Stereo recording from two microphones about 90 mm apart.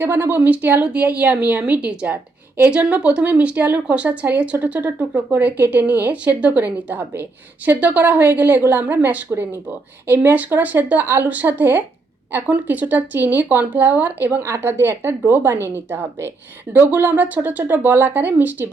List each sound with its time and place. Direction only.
0.0 s a woman's voice: 25° right (ahead or behind)